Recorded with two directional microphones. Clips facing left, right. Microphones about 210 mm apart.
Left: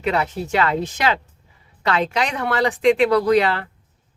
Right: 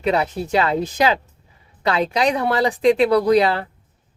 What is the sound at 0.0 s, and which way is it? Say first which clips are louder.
Speech: right 2 dB; 30° right (ahead or behind).